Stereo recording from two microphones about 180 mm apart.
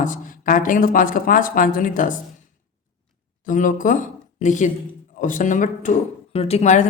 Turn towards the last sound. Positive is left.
turn(degrees=40)  # may be behind; listen again after turning